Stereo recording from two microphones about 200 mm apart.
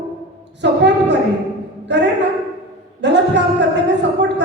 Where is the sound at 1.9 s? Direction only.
60° right (ahead or behind).